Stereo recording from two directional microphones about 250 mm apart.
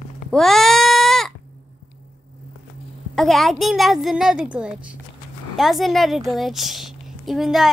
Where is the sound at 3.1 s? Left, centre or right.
Centre.